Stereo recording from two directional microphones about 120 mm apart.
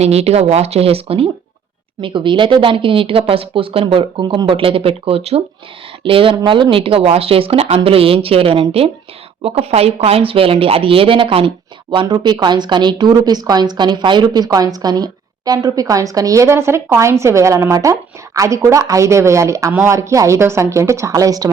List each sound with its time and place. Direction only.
0.0 s speech: 60° right (ahead or behind)
2.0 s speech: 45° right (ahead or behind)